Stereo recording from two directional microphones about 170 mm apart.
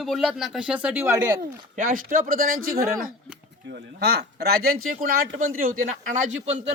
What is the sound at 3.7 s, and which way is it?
Speech, 70° right (ahead or behind).